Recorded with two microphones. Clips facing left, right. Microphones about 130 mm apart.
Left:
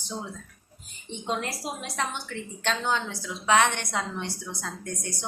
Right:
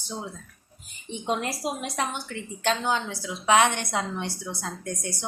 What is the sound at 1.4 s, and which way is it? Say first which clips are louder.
A woman's voice: right 3 dB; 15° right (ahead or behind).